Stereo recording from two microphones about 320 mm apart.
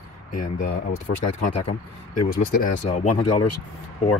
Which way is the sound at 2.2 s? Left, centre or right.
Left.